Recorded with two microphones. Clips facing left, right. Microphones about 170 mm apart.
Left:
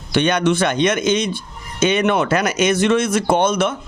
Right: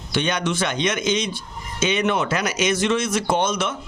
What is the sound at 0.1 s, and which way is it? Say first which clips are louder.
Speech: left 7 dB; 60° left (ahead or behind).